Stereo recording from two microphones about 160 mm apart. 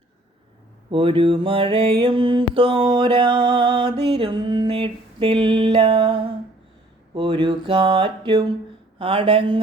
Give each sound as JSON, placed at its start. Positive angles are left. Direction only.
{"t": 0.9, "sound": "music", "side_deg": -35}